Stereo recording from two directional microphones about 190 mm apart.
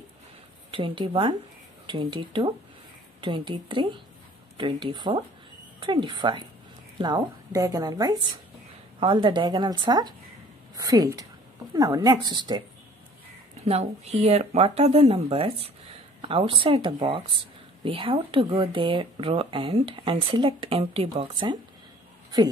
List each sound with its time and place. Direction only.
0.7 s a woman's voice: 25° right (ahead or behind)
13.7 s speech: 35° right (ahead or behind)